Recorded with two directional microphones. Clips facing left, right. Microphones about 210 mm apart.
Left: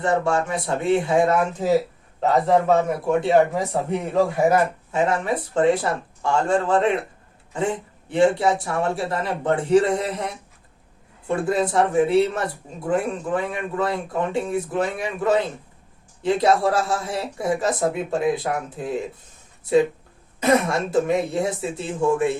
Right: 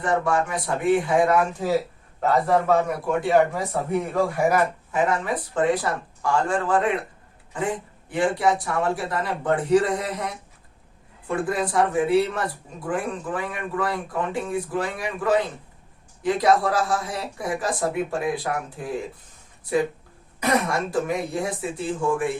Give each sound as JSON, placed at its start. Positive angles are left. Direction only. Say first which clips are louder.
{"t": 0.0, "sound": "a man's voice", "louder": "left 2 dB", "side_deg": 25}